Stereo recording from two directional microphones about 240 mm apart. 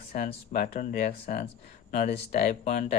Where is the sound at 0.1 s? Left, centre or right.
Left.